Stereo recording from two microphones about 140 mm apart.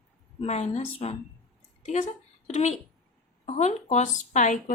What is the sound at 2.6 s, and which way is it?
A woman's voice, 50° left (ahead or behind).